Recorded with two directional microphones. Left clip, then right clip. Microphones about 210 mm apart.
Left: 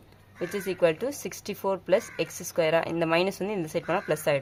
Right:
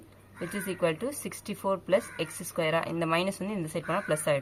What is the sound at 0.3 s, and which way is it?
Speech, 50° left (ahead or behind).